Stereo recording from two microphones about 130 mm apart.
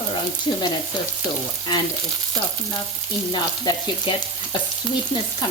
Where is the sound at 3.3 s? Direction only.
35° left (ahead or behind).